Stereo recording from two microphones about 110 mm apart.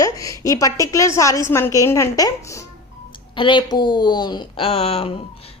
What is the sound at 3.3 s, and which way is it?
A woman's voice, 45° left (ahead or behind).